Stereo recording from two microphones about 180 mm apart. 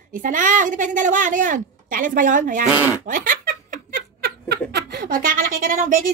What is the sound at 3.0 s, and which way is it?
Giggle, 50° right (ahead or behind).